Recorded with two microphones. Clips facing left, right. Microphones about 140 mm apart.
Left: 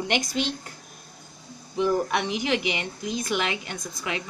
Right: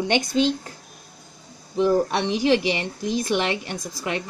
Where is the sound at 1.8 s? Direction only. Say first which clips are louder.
Right 4 dB; 30° right (ahead or behind).